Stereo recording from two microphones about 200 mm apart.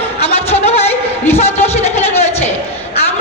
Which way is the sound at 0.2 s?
30° left (ahead or behind).